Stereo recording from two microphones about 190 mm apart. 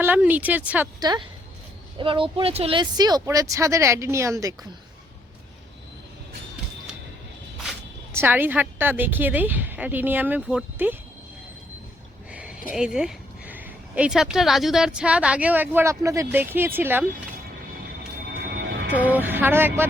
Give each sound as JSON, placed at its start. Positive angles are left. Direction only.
{"t": 0.0, "sound": "speech", "side_deg": -10}
{"t": 0.9, "sound": "speech", "side_deg": -20}
{"t": 8.1, "sound": "speech", "side_deg": -10}
{"t": 12.3, "sound": "a sound", "side_deg": -5}
{"t": 12.7, "sound": "speech", "side_deg": -5}
{"t": 18.3, "sound": "music", "side_deg": -55}
{"t": 18.9, "sound": "speech", "side_deg": -10}